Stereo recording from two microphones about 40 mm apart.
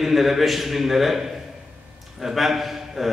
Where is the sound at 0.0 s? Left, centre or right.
Centre.